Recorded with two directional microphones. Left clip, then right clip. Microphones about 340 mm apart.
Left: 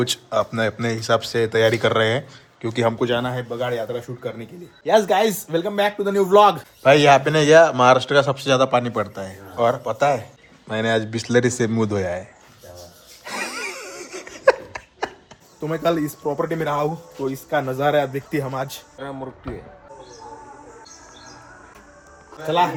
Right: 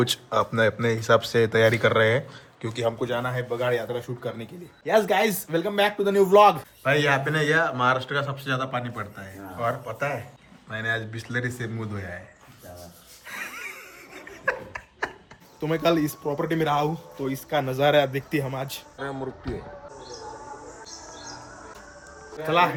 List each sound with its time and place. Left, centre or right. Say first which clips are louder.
0.0 s speech: left 2 dB; centre
2.7 s a man's voice: left 6 dB; left
13.2 s a sound: left 7 dB; centre
15.6 s speech: left 1 dB; centre